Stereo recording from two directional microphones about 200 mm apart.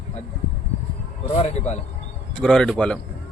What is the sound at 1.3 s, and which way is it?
Speech, 35° left (ahead or behind).